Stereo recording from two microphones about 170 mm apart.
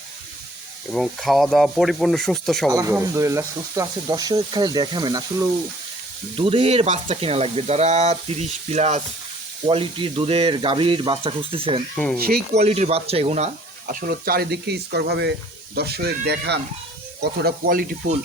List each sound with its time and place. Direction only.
0.9 s speech: centre (ahead or behind)
2.6 s speech: 20° right (ahead or behind)
6.3 s sizzle: 30° right (ahead or behind)
12.5 s speech: 40° right (ahead or behind); by 16.6 s 75° right (ahead or behind)
17.2 s speech: 60° right (ahead or behind)